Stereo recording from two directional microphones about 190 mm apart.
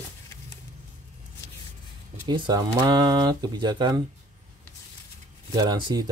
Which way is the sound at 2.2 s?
25° right (ahead or behind).